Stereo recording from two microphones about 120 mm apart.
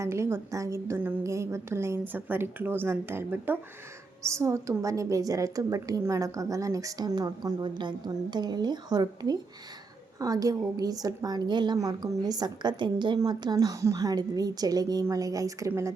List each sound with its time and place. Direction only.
0.0 s a woman's voice: 25° right (ahead or behind)